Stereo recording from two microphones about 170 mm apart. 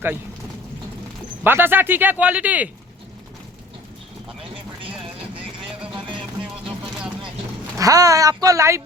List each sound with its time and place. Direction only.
1.5 s speech: 10° right (ahead or behind)
4.8 s vehicle: 30° right (ahead or behind)
7.8 s speech: 20° right (ahead or behind)